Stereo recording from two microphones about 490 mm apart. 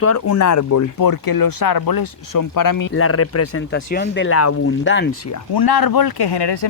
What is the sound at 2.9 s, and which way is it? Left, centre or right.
Speech, left.